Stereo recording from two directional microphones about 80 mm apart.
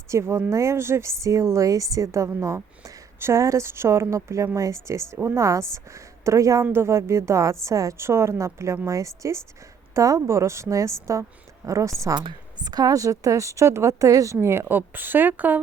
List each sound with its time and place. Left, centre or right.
0.1 s a woman's voice: right
12.1 s a woman's voice: right